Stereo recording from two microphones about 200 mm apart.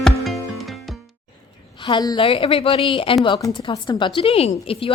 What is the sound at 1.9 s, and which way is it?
Speech, 20° left (ahead or behind).